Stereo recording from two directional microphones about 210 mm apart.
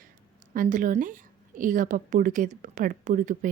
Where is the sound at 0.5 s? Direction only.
40° right (ahead or behind).